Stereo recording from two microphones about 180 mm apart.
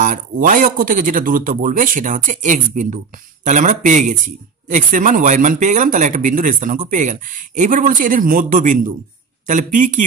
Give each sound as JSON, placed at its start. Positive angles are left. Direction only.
{"t": 0.0, "sound": "speech", "side_deg": -45}